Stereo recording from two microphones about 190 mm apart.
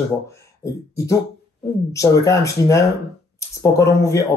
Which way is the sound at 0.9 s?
15° left (ahead or behind).